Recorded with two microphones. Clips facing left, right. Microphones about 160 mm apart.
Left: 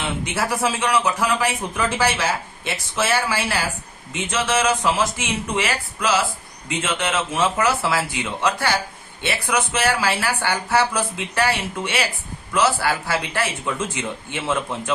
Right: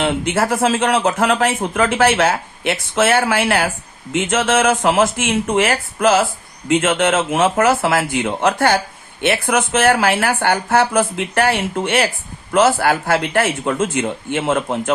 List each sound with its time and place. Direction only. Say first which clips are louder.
0.0 s speech: right 7 dB; 55° right (ahead or behind)